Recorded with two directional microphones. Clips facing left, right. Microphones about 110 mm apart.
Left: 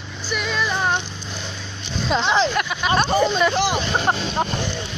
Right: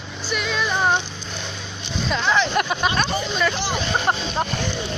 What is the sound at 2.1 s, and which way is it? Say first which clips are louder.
Speech: left 2 dB; 25° left (ahead or behind).